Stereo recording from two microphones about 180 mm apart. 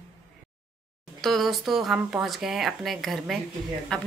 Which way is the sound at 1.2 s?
Centre (ahead or behind).